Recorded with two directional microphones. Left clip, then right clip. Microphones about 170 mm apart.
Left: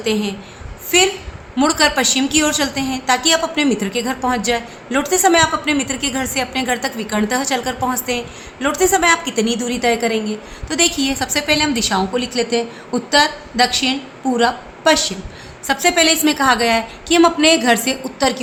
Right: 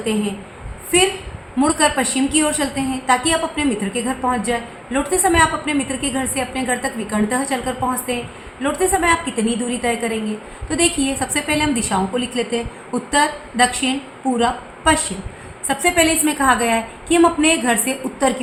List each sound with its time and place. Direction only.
0.0 s a woman's voice: 55° left (ahead or behind)
1.5 s a woman's voice: 55° left (ahead or behind)